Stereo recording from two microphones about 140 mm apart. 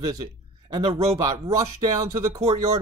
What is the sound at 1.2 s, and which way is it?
Speech, 25° right (ahead or behind).